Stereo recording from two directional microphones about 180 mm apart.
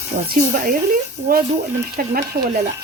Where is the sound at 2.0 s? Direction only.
50° right (ahead or behind).